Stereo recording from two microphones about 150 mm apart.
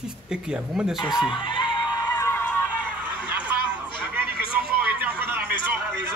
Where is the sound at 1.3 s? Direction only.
35° left (ahead or behind).